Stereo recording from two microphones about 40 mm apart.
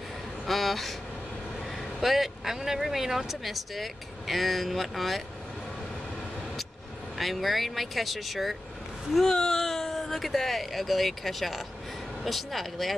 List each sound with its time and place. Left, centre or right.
0.5 s speech: centre
2.0 s speech: centre
7.2 s speech: centre
9.2 s speech: centre